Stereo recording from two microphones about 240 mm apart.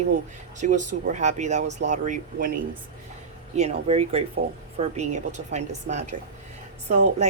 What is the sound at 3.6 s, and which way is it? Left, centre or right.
Speech, right.